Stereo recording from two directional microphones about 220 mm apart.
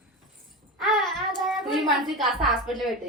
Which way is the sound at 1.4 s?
Centre (ahead or behind).